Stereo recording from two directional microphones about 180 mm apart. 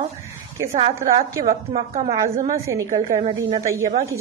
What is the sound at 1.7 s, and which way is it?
Speech, 35° right (ahead or behind).